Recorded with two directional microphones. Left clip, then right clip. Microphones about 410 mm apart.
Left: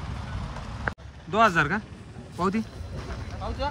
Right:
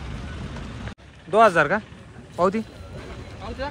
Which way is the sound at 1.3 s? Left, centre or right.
Centre.